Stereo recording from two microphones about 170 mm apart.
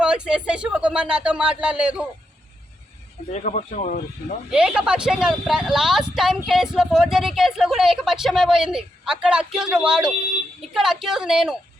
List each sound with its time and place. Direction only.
0.0 s speech: 5° right (ahead or behind)
3.3 s speech: 45° left (ahead or behind)
4.5 s speech: 5° right (ahead or behind)